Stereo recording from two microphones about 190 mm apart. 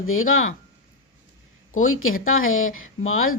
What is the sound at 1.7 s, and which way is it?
Speech, 90° left.